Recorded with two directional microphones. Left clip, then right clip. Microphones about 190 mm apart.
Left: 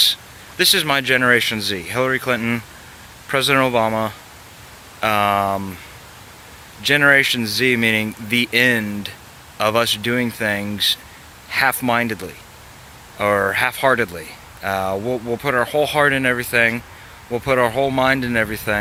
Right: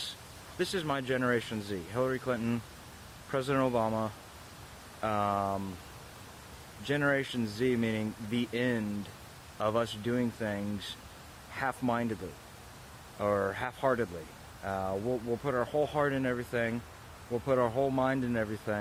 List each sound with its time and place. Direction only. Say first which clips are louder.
0.6 s speech: left 17 dB; 15° left (ahead or behind)
6.8 s speech: left 17 dB; 15° left (ahead or behind)